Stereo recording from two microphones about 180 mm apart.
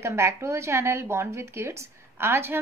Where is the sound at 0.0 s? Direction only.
15° right (ahead or behind).